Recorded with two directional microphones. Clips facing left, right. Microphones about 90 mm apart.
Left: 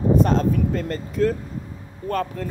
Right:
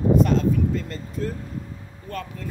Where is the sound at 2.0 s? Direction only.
50° left (ahead or behind).